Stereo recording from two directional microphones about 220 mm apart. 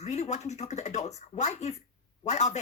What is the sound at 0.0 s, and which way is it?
Speech, 30° left (ahead or behind).